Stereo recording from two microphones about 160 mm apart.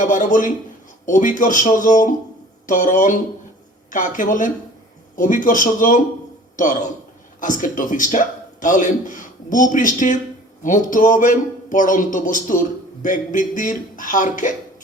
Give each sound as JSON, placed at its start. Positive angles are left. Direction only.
{"t": 0.0, "sound": "a man's voice", "side_deg": 55}